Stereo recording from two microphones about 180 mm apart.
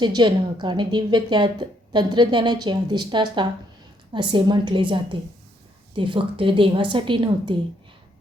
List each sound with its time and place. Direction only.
0.0 s a woman's voice: 25° right (ahead or behind)
6.0 s a woman's voice: 30° right (ahead or behind)